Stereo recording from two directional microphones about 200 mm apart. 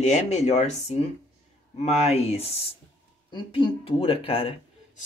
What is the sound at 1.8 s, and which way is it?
Speech, 30° left (ahead or behind).